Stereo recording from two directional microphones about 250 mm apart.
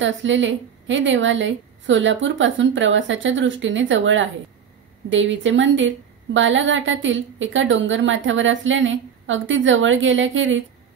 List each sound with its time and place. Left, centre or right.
0.0 s a woman's voice: right